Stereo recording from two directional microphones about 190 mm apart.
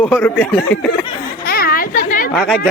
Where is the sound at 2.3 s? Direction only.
Centre (ahead or behind).